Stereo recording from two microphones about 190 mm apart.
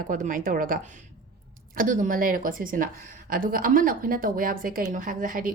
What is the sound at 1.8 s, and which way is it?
A woman's voice, 45° right (ahead or behind).